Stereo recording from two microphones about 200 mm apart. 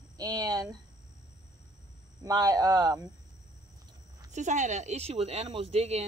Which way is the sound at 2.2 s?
20° right (ahead or behind).